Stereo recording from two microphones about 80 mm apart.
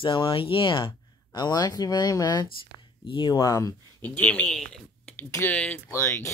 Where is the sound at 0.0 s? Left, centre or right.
Left.